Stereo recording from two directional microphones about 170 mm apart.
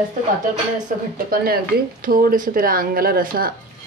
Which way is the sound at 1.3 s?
60° right (ahead or behind).